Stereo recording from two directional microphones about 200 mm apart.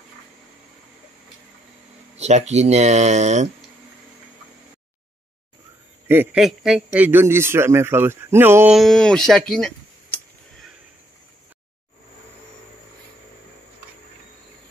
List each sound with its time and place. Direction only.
2.1 s speech: 35° right (ahead or behind)
6.0 s a man's voice: 5° right (ahead or behind)
8.7 s speech: centre (ahead or behind)